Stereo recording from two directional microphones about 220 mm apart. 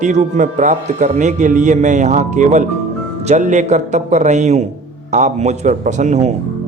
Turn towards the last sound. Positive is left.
turn(degrees=-30)  # may be behind; listen again after turning